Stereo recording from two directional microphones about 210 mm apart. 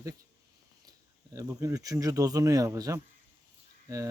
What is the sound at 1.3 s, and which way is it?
Speech, 15° right (ahead or behind).